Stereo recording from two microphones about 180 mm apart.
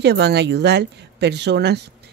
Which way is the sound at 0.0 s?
65° right (ahead or behind).